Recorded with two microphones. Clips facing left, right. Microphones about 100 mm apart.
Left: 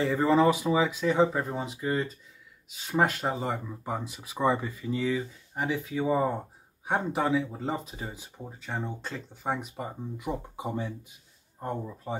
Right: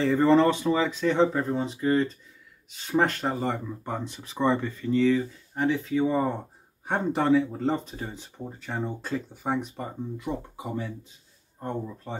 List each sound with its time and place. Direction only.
0.0 s speech: 5° left (ahead or behind)
10.1 s speech: 20° left (ahead or behind)
11.6 s speech: 10° left (ahead or behind)